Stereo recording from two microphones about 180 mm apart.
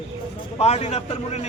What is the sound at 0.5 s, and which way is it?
Speech, 35° left (ahead or behind).